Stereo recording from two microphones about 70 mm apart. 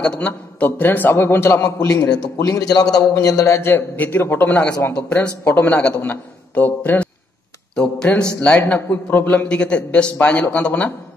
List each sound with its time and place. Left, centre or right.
0.0 s speech: centre
0.3 s a man's voice: left
1.5 s a man's voice: left
3.9 s a man's voice: left
5.4 s a man's voice: left
7.7 s speech: centre
8.4 s a man's voice: left